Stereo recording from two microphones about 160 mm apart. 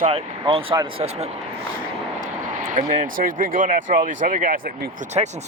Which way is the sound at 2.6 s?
55° right (ahead or behind).